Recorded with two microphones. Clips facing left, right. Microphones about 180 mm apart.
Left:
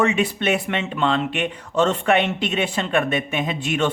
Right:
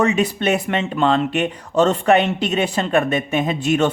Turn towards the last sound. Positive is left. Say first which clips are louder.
# right 4 dB
turn(degrees=-40)  # may be behind; listen again after turning